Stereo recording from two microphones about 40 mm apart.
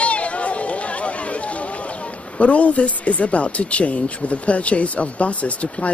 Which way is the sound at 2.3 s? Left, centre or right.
Left.